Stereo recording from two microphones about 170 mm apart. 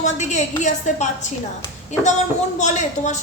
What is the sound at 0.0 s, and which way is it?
A woman's voice, 45° left (ahead or behind).